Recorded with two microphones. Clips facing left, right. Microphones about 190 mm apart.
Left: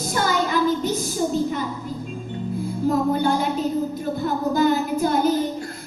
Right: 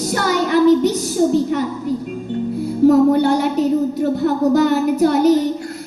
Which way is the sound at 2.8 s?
70° right (ahead or behind).